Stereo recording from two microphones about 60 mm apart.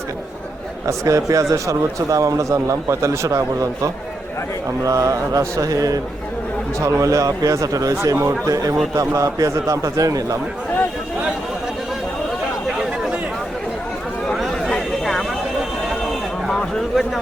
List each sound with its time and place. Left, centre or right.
0.9 s a man's voice: right
6.7 s a man's voice: right
14.3 s a sound: centre